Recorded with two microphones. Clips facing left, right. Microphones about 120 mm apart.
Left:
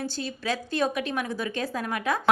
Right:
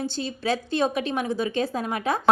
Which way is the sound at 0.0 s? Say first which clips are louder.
Right 3 dB; 25° right (ahead or behind).